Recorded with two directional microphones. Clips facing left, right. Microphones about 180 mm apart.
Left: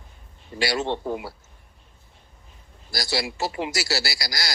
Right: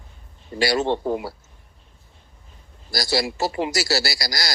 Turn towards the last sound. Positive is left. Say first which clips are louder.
# right 3 dB
turn(degrees=-40)  # may be behind; listen again after turning